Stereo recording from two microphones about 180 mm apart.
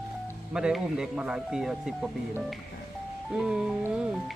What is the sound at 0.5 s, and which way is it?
Speech, 5° right (ahead or behind).